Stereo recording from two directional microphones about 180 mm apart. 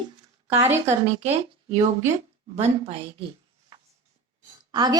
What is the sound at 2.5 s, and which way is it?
Speech, 35° right (ahead or behind).